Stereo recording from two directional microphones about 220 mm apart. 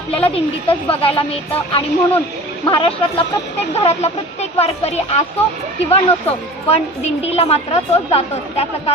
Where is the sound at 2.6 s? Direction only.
20° left (ahead or behind).